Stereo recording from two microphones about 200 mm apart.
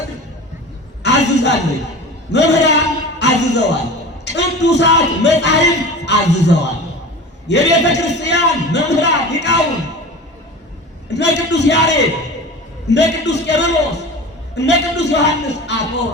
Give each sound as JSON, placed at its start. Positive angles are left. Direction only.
{"t": 1.0, "sound": "a sound", "side_deg": 60}
{"t": 4.3, "sound": "speech", "side_deg": 60}
{"t": 11.1, "sound": "speech", "side_deg": 60}